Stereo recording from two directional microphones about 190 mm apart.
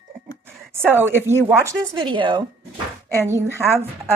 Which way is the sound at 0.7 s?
10° right (ahead or behind).